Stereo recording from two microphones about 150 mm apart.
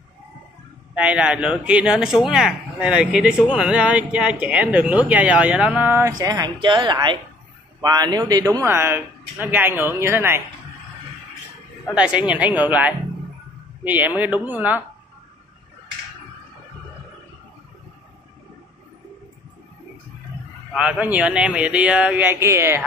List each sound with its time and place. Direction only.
0.9 s speech: 5° right (ahead or behind)
6.1 s a woman's voice: 25° right (ahead or behind)
11.9 s speech: 5° right (ahead or behind)
20.7 s speech: 10° right (ahead or behind)